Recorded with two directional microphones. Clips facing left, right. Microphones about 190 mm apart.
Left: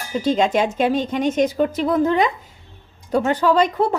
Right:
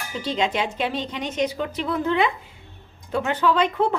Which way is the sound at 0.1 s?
45° left (ahead or behind).